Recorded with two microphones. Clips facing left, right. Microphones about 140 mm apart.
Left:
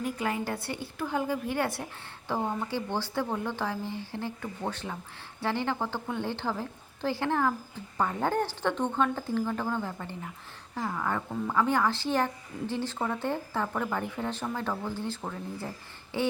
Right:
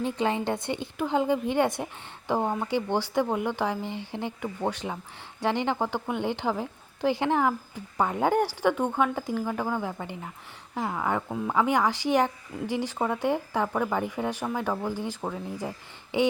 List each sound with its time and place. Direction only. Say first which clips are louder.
0.0 s a woman's voice: right 4 dB; 25° right (ahead or behind)